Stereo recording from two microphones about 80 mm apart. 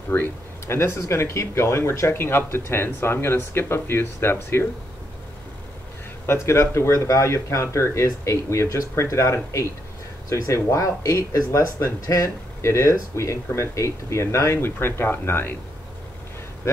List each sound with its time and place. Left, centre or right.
0.1 s speech: left
6.2 s speech: left